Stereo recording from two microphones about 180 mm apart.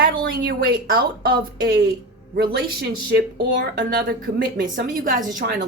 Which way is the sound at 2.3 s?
60° right (ahead or behind).